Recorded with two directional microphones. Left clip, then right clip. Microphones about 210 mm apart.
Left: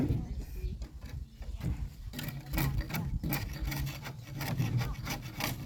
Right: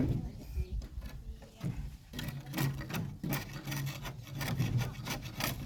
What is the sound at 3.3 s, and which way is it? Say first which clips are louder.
Wood: left 1 dB; 5° left (ahead or behind).